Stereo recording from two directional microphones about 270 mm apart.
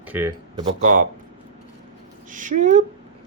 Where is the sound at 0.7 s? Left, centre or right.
Right.